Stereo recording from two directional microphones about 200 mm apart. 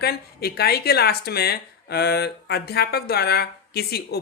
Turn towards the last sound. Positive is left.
turn(degrees=55)  # may be behind; listen again after turning